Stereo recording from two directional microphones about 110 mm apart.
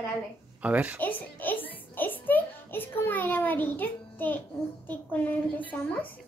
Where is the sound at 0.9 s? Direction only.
15° left (ahead or behind).